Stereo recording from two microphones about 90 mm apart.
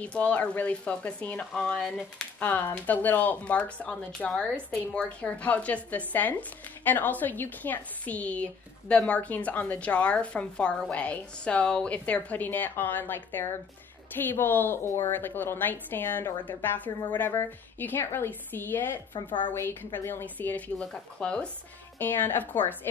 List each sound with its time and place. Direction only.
0.0 s a woman's voice: 15° left (ahead or behind)
19.1 s a woman's voice: 60° left (ahead or behind)
19.5 s a woman's voice: 25° left (ahead or behind)
21.9 s a woman's voice: 25° left (ahead or behind)